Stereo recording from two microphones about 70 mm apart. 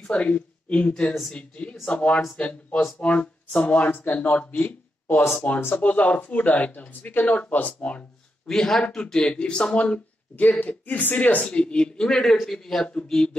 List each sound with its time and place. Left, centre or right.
0.0 s a woman's voice: centre
4.6 s a sound: left
5.6 s speech: left
5.9 s speech: centre
8.5 s a man's voice: centre